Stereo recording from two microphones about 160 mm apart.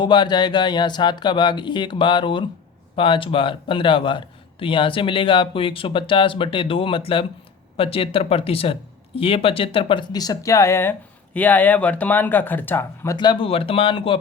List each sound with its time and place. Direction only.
0.0 s speech: 30° left (ahead or behind)
13.1 s speech: 30° left (ahead or behind)